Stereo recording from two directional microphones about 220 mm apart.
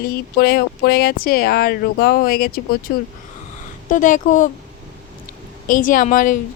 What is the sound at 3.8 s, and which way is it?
Speech, 35° left (ahead or behind).